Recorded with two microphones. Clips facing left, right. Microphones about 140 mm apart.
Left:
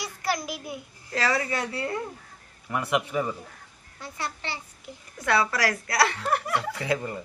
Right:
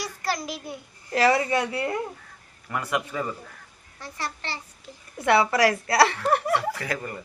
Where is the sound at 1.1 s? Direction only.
25° right (ahead or behind).